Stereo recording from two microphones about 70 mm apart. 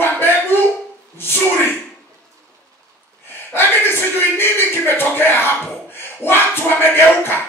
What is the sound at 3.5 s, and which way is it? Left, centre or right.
Speech, left.